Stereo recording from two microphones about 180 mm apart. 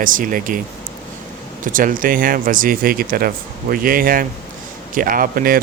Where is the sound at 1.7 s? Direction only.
50° right (ahead or behind).